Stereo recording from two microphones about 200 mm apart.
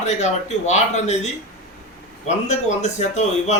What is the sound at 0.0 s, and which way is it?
Speech, 35° left (ahead or behind).